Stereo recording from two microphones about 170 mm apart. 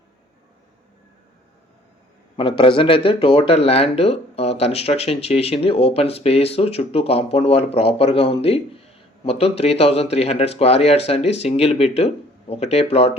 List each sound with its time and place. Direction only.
2.3 s speech: 30° left (ahead or behind)